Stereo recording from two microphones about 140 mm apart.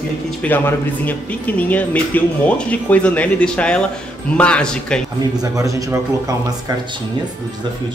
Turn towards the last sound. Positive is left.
turn(degrees=-25)  # may be behind; listen again after turning